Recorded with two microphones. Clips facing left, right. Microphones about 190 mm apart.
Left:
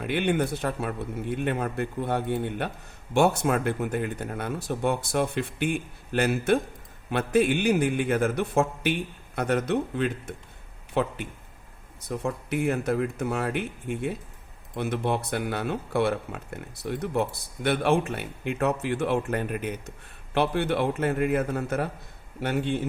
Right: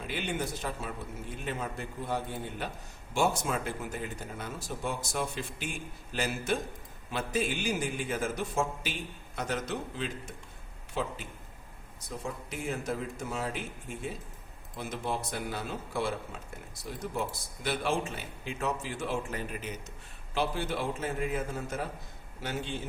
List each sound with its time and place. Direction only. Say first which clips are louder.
0.0 s speech: left 9 dB; 60° left (ahead or behind)